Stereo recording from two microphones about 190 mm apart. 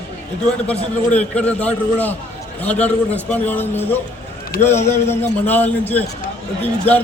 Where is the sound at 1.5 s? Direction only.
10° left (ahead or behind).